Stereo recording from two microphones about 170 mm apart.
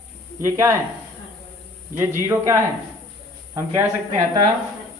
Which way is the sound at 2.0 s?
15° right (ahead or behind).